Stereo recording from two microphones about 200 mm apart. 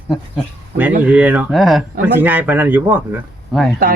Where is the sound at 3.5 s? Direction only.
Centre (ahead or behind).